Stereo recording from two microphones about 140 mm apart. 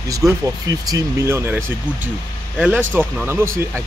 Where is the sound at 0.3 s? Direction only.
25° right (ahead or behind).